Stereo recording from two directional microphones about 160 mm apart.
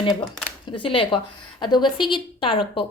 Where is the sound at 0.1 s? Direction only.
5° left (ahead or behind).